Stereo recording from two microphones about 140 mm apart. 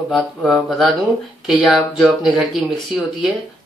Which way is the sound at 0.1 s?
5° left (ahead or behind).